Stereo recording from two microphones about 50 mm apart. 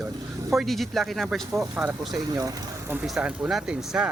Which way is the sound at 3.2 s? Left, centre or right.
Centre.